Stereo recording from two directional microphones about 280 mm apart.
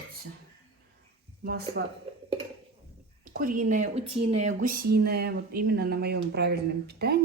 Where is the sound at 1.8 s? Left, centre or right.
Right.